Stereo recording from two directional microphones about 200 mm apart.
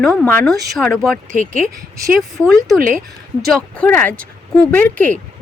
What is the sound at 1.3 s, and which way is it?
Speech, 40° right (ahead or behind).